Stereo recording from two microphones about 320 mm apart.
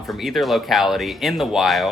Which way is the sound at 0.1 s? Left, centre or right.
Centre.